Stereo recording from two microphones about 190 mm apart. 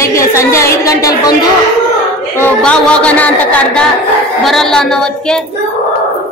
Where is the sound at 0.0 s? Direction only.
15° left (ahead or behind).